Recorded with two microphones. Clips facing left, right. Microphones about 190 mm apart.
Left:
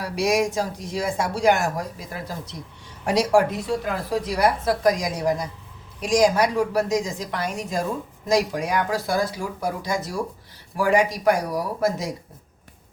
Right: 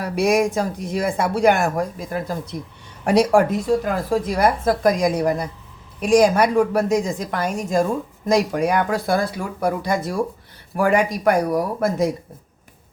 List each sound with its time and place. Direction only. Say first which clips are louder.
0.0 s speech: right 4 dB; 55° right (ahead or behind)